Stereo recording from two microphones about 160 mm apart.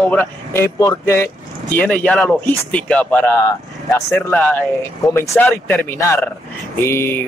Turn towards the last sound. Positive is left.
turn(degrees=15)  # may be behind; listen again after turning